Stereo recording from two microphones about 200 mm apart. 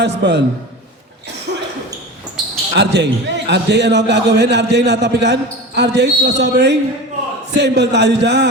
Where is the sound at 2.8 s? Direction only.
60° right (ahead or behind).